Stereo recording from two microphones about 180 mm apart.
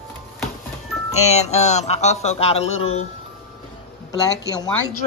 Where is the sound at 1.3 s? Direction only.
40° left (ahead or behind).